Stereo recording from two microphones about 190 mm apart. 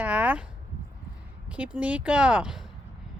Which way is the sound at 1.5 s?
5° right (ahead or behind).